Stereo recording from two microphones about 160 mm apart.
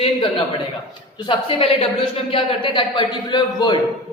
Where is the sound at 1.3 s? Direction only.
35° left (ahead or behind).